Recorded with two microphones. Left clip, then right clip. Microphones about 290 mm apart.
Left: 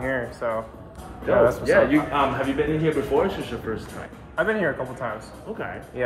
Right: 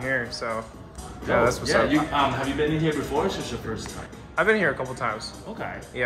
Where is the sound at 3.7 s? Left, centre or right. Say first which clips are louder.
Left 6 dB; centre.